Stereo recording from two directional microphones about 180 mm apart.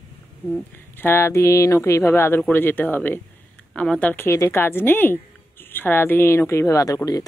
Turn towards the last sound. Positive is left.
turn(degrees=20)  # may be behind; listen again after turning